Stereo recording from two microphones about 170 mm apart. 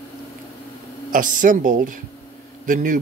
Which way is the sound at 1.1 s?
50° right (ahead or behind).